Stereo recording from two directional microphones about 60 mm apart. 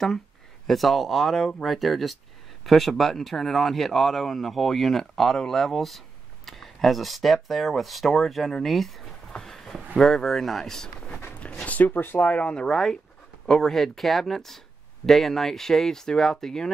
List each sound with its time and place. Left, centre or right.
0.7 s speech: centre
9.3 s a sound: centre
9.9 s speech: centre
11.3 s a sound: left
12.4 s speech: left
12.6 s speech: centre